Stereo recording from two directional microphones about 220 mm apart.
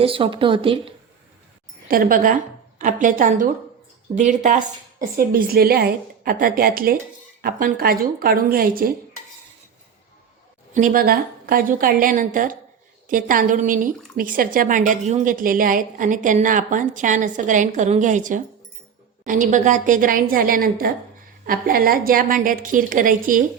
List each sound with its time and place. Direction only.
0.0 s speech: 25° right (ahead or behind)
1.9 s a woman's voice: 40° right (ahead or behind)
10.8 s a woman's voice: 40° right (ahead or behind)